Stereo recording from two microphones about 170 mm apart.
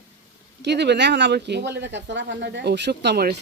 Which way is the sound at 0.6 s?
80° right.